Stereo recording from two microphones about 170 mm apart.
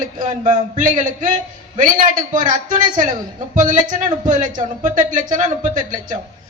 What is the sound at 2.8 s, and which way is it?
A woman's voice, 50° right (ahead or behind).